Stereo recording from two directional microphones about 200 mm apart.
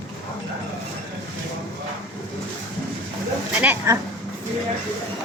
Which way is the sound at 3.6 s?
10° right (ahead or behind).